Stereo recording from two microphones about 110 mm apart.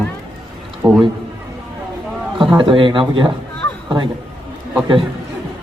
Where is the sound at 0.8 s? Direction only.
10° right (ahead or behind).